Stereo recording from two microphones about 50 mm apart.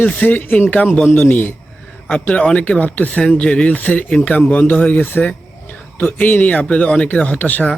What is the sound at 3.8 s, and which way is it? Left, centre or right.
Speech, left.